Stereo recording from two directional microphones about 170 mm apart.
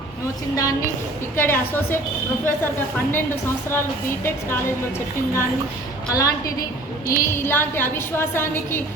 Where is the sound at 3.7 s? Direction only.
15° left (ahead or behind).